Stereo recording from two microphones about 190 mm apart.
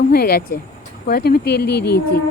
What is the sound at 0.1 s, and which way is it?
Speech, 50° left (ahead or behind).